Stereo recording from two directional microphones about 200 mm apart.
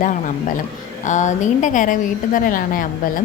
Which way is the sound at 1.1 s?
35° left (ahead or behind).